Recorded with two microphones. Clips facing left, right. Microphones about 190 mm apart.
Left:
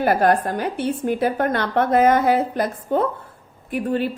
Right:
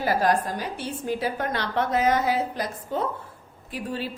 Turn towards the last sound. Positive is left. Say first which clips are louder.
# left 9 dB
turn(degrees=55)  # may be behind; listen again after turning